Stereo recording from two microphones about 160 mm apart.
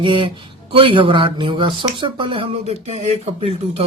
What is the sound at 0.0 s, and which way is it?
Speech, 30° right (ahead or behind).